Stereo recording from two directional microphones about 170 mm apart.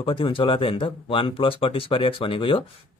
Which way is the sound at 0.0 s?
30° left (ahead or behind).